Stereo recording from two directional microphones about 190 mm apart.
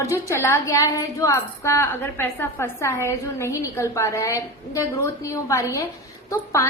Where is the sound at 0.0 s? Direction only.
15° left (ahead or behind).